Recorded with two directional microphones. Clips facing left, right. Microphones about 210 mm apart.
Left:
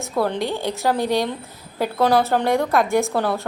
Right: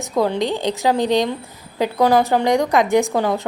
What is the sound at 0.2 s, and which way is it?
A woman's voice, 15° right (ahead or behind).